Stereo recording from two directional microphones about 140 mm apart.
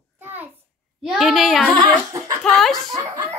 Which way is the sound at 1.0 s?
Centre (ahead or behind).